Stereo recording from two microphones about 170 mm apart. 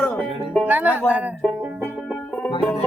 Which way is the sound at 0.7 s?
10° right (ahead or behind).